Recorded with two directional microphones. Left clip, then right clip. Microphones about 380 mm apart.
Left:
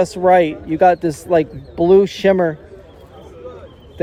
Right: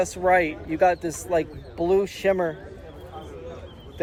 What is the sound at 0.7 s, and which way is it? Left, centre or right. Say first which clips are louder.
Speech: left 8 dB; centre.